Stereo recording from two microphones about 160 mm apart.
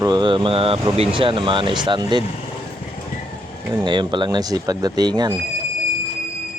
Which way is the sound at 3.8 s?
30° right (ahead or behind).